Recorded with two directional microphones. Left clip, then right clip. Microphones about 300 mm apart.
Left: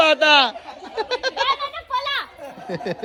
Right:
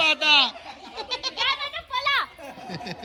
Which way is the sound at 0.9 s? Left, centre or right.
Centre.